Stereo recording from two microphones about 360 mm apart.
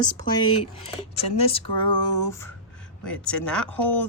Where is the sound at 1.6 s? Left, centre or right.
Left.